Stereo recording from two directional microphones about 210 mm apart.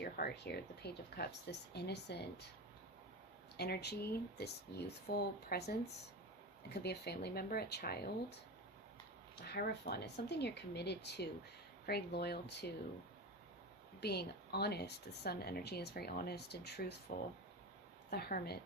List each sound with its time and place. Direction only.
0.0 s speech: 50° left (ahead or behind)
3.6 s speech: 50° left (ahead or behind)
6.8 s speech: 50° left (ahead or behind)
9.5 s speech: 50° left (ahead or behind)
14.0 s speech: 50° left (ahead or behind)
18.1 s speech: 45° left (ahead or behind)